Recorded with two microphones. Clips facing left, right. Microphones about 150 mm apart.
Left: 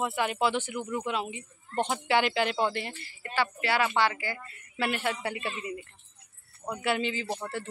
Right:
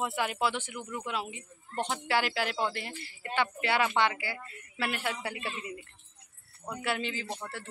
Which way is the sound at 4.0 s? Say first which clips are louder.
Left 1 dB; 10° right (ahead or behind).